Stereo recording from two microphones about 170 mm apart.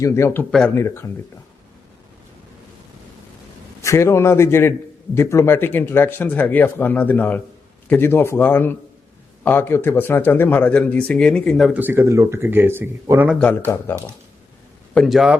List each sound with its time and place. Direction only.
0.0 s speech: 15° left (ahead or behind)
3.8 s speech: 15° left (ahead or behind); by 11.8 s centre (ahead or behind)
11.8 s speech: 10° right (ahead or behind)
13.4 s speech: 10° left (ahead or behind)
14.9 s speech: centre (ahead or behind)